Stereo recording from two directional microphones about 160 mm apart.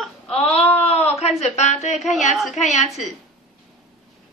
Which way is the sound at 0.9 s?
40° left (ahead or behind).